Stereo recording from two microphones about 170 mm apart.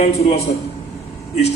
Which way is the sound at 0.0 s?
40° left (ahead or behind).